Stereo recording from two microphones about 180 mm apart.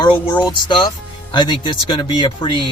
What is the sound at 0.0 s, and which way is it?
Speech, 25° left (ahead or behind).